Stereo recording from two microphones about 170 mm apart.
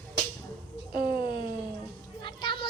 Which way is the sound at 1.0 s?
25° left (ahead or behind).